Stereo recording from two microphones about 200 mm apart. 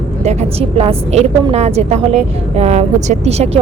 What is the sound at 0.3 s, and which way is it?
A woman's voice, 30° right (ahead or behind).